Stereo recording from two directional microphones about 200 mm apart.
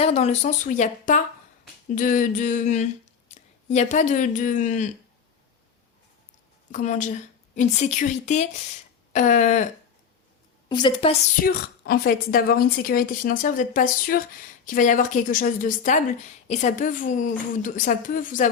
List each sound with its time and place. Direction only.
0.0 s a woman's voice: 35° left (ahead or behind)
6.7 s a woman's voice: 35° left (ahead or behind)
10.7 s a woman's voice: 20° left (ahead or behind)
11.4 s a woman's voice: 50° left (ahead or behind)